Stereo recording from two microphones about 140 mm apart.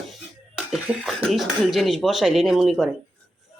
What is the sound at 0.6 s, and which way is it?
Cough, 5° right (ahead or behind).